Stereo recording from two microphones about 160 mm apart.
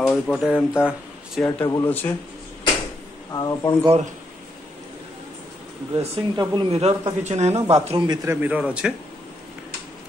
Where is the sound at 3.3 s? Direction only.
20° left (ahead or behind).